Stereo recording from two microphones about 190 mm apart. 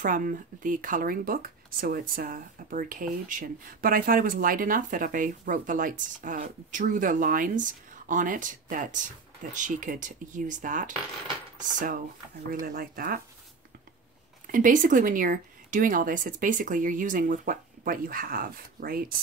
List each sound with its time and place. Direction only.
0.0 s speech: 45° right (ahead or behind)
14.5 s speech: 45° right (ahead or behind)